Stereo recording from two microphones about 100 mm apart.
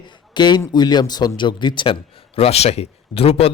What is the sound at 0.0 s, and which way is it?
A man's voice, 45° left (ahead or behind).